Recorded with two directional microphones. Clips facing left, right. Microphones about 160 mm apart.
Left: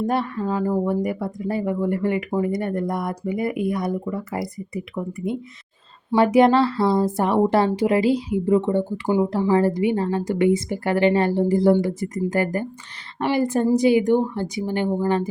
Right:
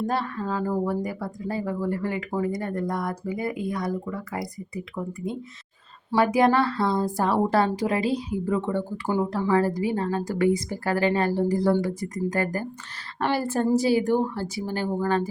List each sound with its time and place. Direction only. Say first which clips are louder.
0.1 s a woman's voice: left 4 dB; 20° left (ahead or behind)
6.1 s a woman's voice: left 5 dB; 25° left (ahead or behind)